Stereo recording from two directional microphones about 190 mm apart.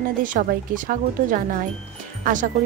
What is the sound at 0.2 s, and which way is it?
Speech, 45° right (ahead or behind).